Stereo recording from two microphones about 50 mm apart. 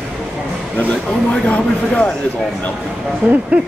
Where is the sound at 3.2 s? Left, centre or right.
Right.